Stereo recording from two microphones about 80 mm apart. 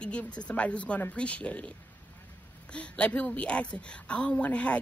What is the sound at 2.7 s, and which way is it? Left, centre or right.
Speech, centre.